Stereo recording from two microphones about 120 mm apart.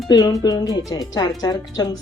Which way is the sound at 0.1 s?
30° left (ahead or behind).